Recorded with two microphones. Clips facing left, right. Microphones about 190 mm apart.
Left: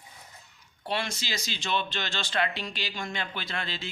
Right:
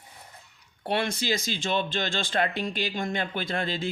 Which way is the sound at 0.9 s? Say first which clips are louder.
Right 6 dB; 60° right (ahead or behind).